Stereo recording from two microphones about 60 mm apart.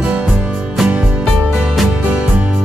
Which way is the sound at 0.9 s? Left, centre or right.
Right.